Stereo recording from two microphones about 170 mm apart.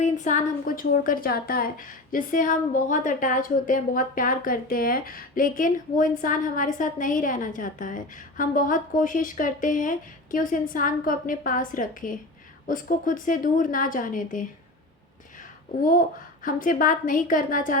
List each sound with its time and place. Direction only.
0.0 s a woman's voice: 45° left (ahead or behind)
15.8 s a woman's voice: 55° left (ahead or behind)